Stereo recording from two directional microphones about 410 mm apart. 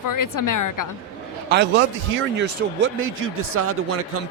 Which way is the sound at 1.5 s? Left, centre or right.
Right.